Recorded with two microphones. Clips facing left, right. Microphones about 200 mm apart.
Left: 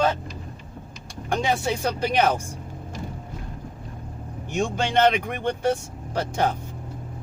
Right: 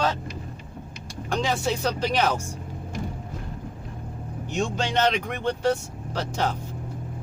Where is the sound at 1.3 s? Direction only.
55° left (ahead or behind).